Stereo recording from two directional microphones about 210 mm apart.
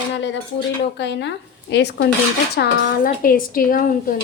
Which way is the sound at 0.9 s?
55° left (ahead or behind).